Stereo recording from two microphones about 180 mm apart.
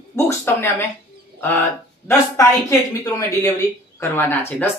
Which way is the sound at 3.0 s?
15° left (ahead or behind).